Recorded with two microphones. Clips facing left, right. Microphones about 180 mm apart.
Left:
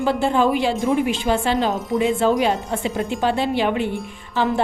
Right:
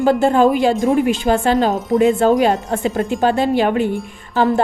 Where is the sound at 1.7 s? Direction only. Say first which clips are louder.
Right 5 dB; centre (ahead or behind).